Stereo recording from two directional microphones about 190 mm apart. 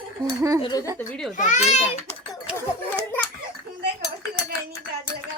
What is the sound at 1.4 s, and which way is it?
Speech, 40° left (ahead or behind).